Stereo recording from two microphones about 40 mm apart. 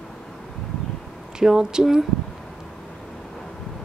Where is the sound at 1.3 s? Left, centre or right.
Centre.